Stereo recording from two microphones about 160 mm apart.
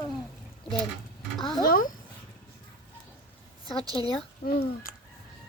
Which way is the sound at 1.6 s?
65° left (ahead or behind).